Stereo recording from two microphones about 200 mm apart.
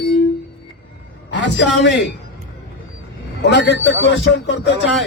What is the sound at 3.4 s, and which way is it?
A man's voice, 60° left (ahead or behind).